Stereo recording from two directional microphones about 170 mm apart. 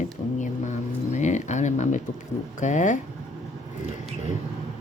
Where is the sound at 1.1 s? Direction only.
45° left (ahead or behind).